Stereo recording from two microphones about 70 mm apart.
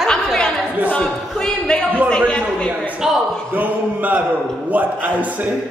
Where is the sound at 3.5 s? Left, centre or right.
Right.